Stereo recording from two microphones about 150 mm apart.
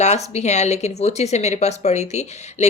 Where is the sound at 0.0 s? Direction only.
45° left (ahead or behind).